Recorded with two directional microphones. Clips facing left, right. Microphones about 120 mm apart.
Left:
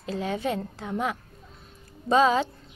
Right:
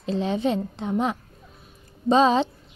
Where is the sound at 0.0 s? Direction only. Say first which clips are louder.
Right 5 dB; 25° right (ahead or behind).